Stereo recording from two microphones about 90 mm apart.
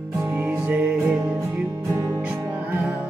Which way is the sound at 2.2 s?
15° right (ahead or behind).